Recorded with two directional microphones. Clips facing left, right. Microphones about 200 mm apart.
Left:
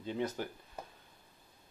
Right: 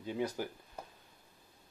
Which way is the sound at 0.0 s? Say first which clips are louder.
Even; 10° right (ahead or behind).